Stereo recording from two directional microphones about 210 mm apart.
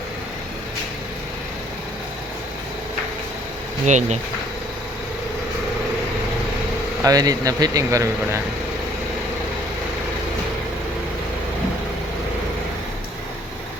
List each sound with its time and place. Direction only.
3.8 s speech: 35° right (ahead or behind)
7.0 s speech: 15° right (ahead or behind)